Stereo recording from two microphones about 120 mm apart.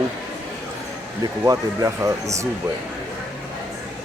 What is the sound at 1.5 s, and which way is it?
Speech, 25° right (ahead or behind).